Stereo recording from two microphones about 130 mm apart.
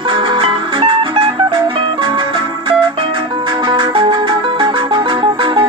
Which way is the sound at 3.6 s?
40° right (ahead or behind).